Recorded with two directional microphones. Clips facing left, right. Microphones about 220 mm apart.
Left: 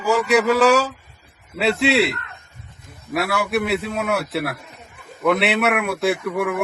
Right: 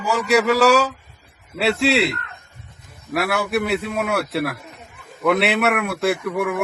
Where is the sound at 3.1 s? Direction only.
Centre (ahead or behind).